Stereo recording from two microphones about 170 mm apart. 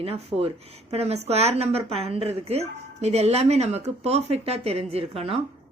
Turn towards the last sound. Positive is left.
turn(degrees=-35)  # may be behind; listen again after turning